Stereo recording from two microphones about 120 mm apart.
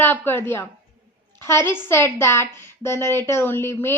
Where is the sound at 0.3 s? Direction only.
20° left (ahead or behind).